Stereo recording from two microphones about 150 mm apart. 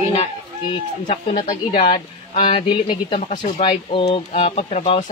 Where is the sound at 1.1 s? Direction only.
55° left (ahead or behind).